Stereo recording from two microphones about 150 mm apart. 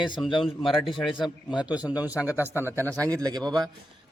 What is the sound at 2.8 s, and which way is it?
Speech, 20° right (ahead or behind).